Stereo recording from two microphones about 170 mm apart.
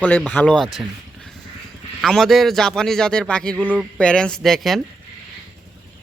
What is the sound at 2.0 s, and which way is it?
A man's voice, centre (ahead or behind).